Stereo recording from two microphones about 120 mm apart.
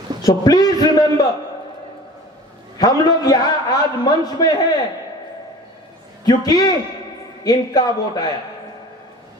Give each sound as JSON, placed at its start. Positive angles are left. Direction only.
{"t": 0.3, "sound": "a man's voice", "side_deg": 30}
{"t": 2.7, "sound": "a man's voice", "side_deg": 30}
{"t": 6.2, "sound": "a man's voice", "side_deg": 35}